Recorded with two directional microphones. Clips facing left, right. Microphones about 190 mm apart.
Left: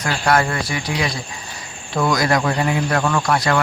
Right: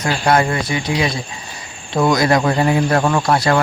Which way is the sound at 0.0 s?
20° right (ahead or behind).